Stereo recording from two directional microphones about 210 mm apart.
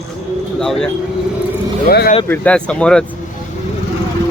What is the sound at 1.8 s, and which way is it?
Speech, 50° left (ahead or behind).